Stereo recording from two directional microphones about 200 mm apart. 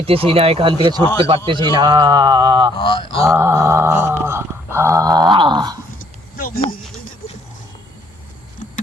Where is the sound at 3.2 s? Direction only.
15° right (ahead or behind).